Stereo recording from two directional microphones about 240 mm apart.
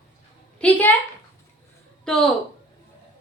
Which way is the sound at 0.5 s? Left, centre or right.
Centre.